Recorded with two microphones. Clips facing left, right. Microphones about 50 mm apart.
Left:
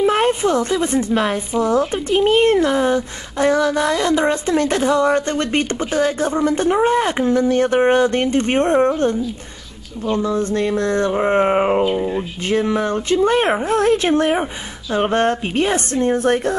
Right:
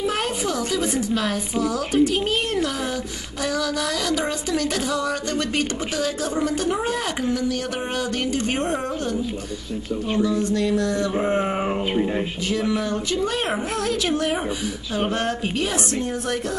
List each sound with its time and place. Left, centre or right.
0.0 s a woman's voice: left
10.2 s a woman's voice: left